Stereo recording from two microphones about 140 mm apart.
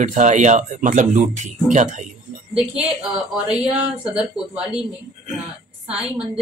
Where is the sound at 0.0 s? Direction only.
60° right (ahead or behind).